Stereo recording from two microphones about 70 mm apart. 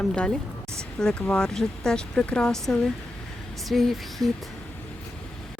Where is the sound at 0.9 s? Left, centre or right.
Centre.